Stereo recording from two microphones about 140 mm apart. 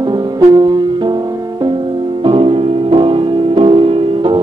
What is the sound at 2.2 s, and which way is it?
Music, 40° right (ahead or behind).